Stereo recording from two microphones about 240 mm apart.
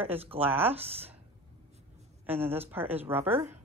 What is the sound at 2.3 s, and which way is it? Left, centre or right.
Speech, centre.